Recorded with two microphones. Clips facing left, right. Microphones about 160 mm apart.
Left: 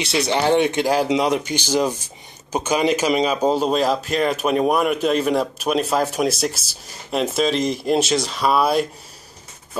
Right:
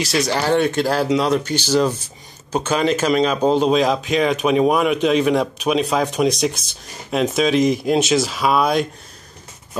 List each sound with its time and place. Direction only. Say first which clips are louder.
0.3 s speech: left 2 dB; 20° left (ahead or behind); by 8.8 s 5° left (ahead or behind)